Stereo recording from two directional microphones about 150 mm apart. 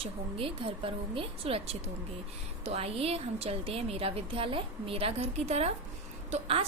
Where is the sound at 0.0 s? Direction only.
40° right (ahead or behind).